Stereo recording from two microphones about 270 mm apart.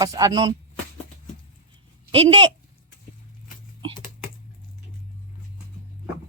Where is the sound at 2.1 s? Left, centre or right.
Centre.